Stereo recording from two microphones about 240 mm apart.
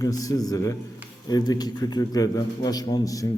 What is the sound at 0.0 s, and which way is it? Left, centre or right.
A man's voice, centre.